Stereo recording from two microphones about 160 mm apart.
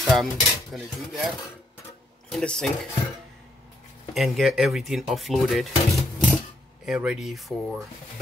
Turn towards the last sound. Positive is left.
turn(degrees=0)  # may be behind; listen again after turning